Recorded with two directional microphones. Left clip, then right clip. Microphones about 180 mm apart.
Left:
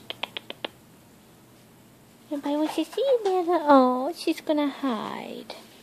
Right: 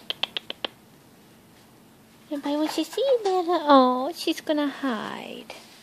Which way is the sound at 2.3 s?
20° right (ahead or behind).